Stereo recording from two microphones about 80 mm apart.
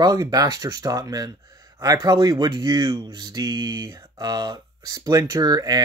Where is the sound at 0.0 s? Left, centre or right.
Right.